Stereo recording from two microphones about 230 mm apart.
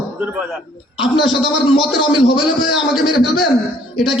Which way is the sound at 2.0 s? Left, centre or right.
Left.